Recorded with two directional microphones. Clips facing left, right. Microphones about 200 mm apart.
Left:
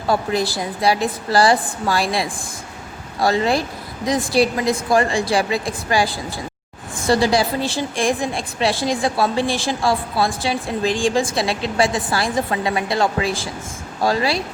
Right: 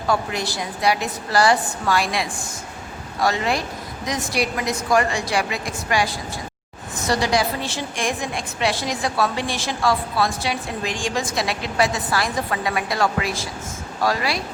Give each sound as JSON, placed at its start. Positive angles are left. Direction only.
{"t": 0.1, "sound": "a woman's voice", "side_deg": 30}